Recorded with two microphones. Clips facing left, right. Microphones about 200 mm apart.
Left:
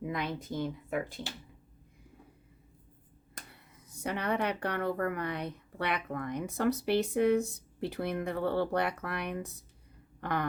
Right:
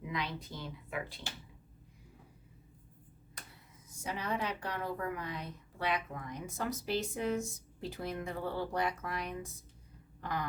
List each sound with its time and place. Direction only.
0.0 s speech: 50° left (ahead or behind)
3.3 s speech: 60° left (ahead or behind)